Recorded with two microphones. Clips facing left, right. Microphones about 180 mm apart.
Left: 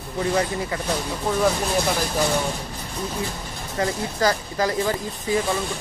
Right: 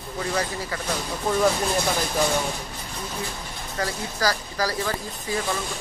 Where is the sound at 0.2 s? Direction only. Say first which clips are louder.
Left 5 dB; 20° left (ahead or behind).